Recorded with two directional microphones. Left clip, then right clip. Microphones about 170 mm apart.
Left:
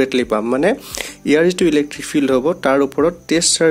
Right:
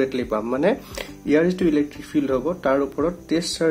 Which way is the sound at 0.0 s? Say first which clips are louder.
Left 6 dB; 50° left (ahead or behind).